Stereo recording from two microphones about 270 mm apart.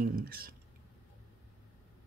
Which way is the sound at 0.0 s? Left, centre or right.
Right.